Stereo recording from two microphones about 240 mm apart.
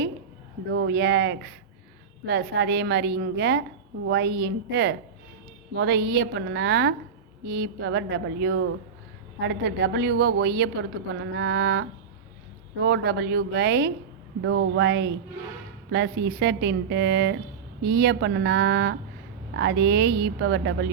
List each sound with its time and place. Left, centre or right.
0.7 s a woman's voice: right